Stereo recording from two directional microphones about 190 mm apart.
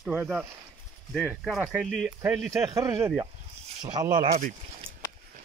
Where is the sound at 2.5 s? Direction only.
15° right (ahead or behind).